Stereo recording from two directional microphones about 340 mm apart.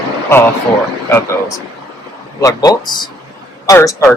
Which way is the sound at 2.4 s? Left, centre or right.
Centre.